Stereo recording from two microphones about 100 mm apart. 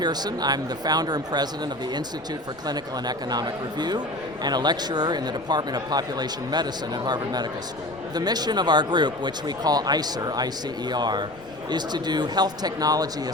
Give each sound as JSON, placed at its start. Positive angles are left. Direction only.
{"t": 0.0, "sound": "speech", "side_deg": -45}
{"t": 2.6, "sound": "speech", "side_deg": -45}